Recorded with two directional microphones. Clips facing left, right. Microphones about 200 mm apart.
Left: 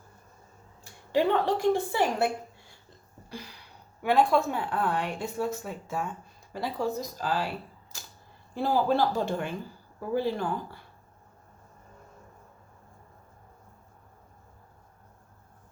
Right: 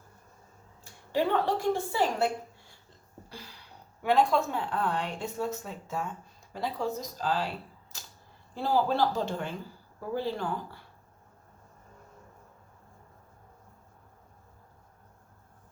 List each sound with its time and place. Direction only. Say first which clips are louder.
1.1 s a woman's voice: left 2 dB; 20° left (ahead or behind)
3.2 s a sound: left 6 dB; 15° left (ahead or behind)
4.0 s a woman's voice: left 2 dB; 10° left (ahead or behind)
8.6 s a woman's voice: left 1 dB; 15° left (ahead or behind)